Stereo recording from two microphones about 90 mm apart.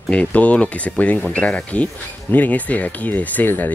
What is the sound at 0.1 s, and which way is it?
Speech, 15° left (ahead or behind).